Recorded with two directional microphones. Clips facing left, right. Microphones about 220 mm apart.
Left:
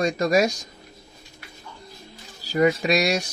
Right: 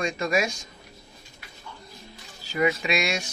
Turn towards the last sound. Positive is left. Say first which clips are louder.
# left 5 dB
turn(degrees=40)  # may be behind; listen again after turning